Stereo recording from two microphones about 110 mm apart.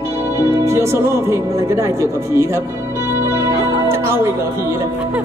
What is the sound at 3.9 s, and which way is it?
Music, 20° right (ahead or behind).